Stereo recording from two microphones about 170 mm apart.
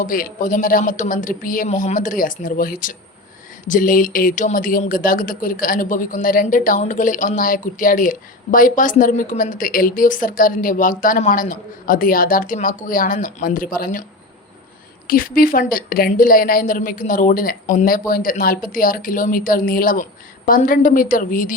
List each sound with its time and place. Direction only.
0.0 s speech: 55° left (ahead or behind)
15.0 s a woman's voice: 55° left (ahead or behind)